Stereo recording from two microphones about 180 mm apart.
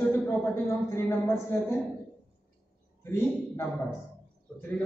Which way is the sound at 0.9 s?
15° left (ahead or behind).